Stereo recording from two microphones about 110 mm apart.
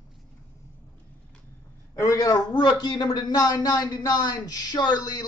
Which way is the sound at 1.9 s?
30° left (ahead or behind).